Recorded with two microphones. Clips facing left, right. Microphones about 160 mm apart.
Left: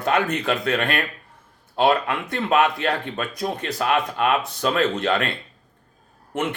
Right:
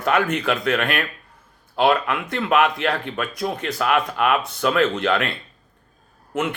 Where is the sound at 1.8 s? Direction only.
35° left (ahead or behind).